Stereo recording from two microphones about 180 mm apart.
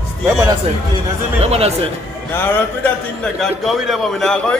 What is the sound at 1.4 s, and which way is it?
Speech, 35° right (ahead or behind).